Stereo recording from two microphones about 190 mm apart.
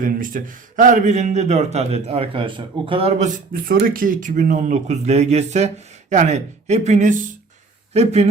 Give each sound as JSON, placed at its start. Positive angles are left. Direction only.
{"t": 0.0, "sound": "a man's voice", "side_deg": -45}